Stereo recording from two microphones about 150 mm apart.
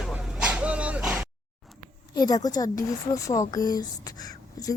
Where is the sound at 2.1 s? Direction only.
25° left (ahead or behind).